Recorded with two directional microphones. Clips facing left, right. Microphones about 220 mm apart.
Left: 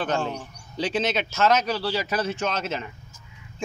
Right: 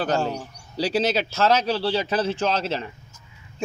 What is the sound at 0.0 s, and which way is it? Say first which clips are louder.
A man's voice: right 3 dB; 35° right (ahead or behind).